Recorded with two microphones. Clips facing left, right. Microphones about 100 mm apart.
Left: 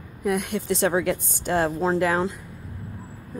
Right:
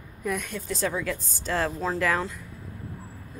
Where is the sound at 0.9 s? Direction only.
60° left (ahead or behind).